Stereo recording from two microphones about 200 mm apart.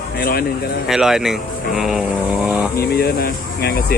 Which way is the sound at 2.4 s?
5° right (ahead or behind).